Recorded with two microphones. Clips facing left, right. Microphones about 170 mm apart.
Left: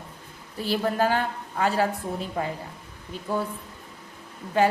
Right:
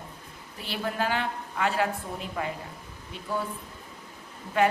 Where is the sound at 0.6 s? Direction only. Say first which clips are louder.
Left 6 dB; 40° left (ahead or behind).